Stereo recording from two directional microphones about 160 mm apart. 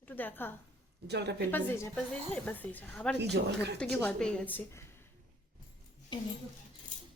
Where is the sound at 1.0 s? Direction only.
90° right.